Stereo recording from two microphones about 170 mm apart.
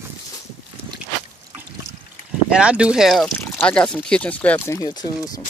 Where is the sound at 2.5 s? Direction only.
5° right (ahead or behind); by 5.3 s 25° left (ahead or behind).